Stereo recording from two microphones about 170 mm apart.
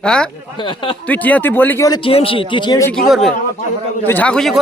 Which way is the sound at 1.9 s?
30° left (ahead or behind).